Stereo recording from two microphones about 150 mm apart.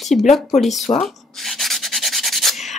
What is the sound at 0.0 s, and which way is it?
Speech, centre (ahead or behind).